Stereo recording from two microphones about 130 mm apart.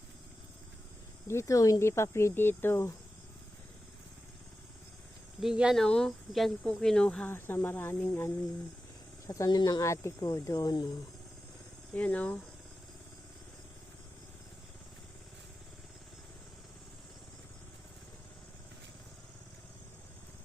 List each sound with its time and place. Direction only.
1.3 s speech: 25° left (ahead or behind)
5.4 s speech: 5° right (ahead or behind)
7.3 s speech: 20° left (ahead or behind); by 10.9 s 35° left (ahead or behind)
11.9 s speech: 10° left (ahead or behind)